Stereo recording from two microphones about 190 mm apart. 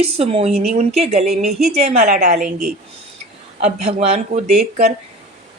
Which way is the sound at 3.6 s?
35° right (ahead or behind).